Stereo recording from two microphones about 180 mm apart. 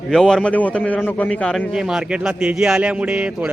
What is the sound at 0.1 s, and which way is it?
A man's voice, centre (ahead or behind).